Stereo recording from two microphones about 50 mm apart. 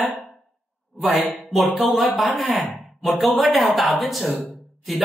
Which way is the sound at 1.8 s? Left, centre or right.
Centre.